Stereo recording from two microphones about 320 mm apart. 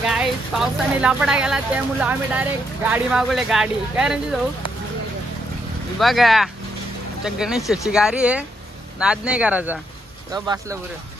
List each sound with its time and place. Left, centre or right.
0.1 s speech: centre
5.9 s speech: centre